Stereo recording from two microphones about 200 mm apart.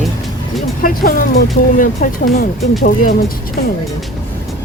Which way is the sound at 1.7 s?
40° left (ahead or behind).